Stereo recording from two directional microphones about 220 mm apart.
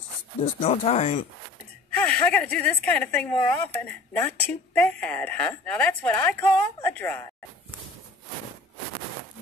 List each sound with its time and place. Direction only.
0.4 s speech: 25° left (ahead or behind)
2.0 s a woman's voice: 5° left (ahead or behind)